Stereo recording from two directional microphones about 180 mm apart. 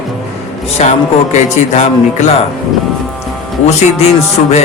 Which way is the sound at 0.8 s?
35° left (ahead or behind).